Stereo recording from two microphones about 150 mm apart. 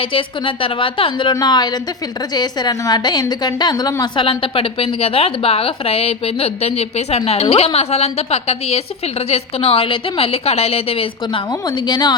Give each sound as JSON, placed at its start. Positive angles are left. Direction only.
{"t": 0.0, "sound": "a woman's voice", "side_deg": 35}